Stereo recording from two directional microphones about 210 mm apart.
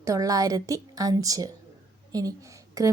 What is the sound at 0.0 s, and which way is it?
Speech, 15° right (ahead or behind).